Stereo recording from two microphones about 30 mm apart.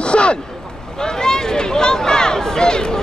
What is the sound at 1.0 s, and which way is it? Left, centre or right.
Speech, left.